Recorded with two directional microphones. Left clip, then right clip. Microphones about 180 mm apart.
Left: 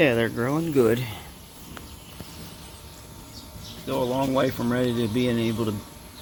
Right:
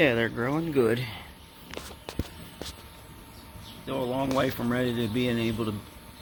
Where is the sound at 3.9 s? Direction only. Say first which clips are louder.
Left 4 dB; centre (ahead or behind).